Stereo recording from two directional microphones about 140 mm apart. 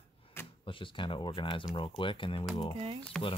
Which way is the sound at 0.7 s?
35° left (ahead or behind).